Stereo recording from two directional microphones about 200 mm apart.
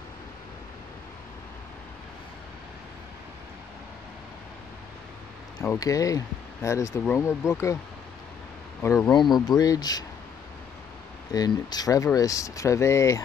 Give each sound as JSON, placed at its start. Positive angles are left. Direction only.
{"t": 5.6, "sound": "speech", "side_deg": 15}
{"t": 8.8, "sound": "speech", "side_deg": 15}
{"t": 11.3, "sound": "speech", "side_deg": 20}